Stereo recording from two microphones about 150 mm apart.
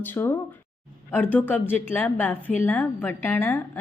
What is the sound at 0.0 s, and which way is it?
A woman's voice, 15° left (ahead or behind).